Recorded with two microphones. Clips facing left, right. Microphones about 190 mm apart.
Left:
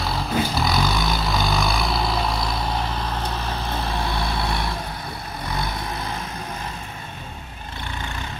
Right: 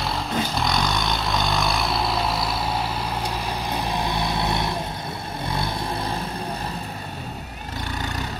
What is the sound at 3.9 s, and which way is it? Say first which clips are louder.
Vehicle: right 1 dB; 20° right (ahead or behind).